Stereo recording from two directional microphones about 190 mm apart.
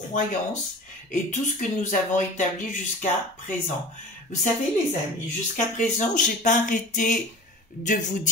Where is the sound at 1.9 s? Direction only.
40° left (ahead or behind).